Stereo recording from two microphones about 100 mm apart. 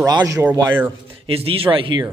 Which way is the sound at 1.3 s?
70° right (ahead or behind).